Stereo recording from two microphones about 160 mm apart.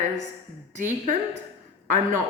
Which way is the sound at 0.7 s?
50° right (ahead or behind).